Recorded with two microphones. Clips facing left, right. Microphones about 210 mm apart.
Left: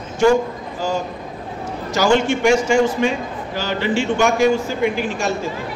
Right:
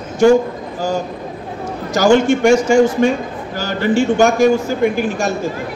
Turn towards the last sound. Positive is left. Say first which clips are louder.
# right 4 dB
turn(degrees=-45)  # may be behind; listen again after turning